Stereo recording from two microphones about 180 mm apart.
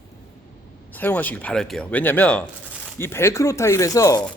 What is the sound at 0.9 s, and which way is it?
A man's voice, 10° left (ahead or behind).